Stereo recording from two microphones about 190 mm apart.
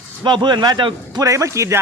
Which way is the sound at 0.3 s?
25° right (ahead or behind).